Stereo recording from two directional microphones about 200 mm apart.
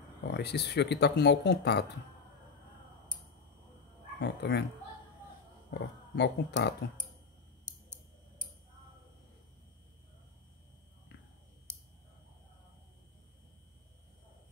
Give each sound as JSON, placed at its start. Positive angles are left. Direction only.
{"t": 0.2, "sound": "speech", "side_deg": 55}
{"t": 4.2, "sound": "speech", "side_deg": 55}
{"t": 5.7, "sound": "speech", "side_deg": 60}